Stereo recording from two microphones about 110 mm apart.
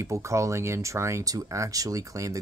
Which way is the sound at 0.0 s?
25° right (ahead or behind).